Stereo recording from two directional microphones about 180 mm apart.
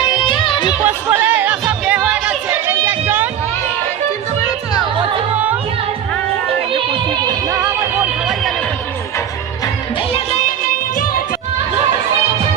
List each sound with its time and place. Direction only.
0.2 s music: 25° left (ahead or behind)
0.9 s music: 10° right (ahead or behind)